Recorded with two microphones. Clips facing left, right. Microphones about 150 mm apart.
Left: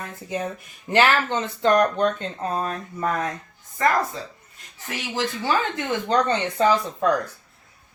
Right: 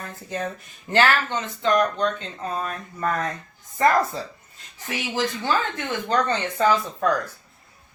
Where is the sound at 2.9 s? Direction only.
15° left (ahead or behind).